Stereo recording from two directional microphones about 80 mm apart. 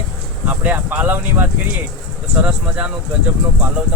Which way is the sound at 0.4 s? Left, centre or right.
Right.